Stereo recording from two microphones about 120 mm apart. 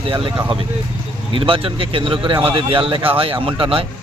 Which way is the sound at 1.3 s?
50° right (ahead or behind).